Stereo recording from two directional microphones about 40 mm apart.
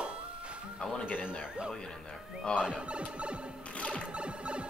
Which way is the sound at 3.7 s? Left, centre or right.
Left.